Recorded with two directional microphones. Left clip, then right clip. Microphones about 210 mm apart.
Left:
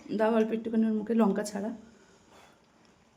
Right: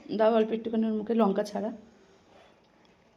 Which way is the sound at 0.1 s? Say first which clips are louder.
Right 3 dB; 5° left (ahead or behind).